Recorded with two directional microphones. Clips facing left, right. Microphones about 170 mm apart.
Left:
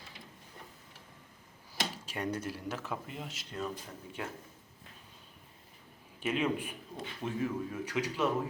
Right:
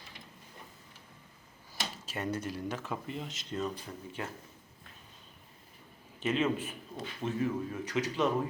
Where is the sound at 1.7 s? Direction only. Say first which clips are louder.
Left 3 dB; 10° left (ahead or behind).